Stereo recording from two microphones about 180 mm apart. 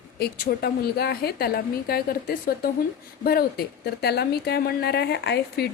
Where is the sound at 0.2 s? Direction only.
60° left (ahead or behind).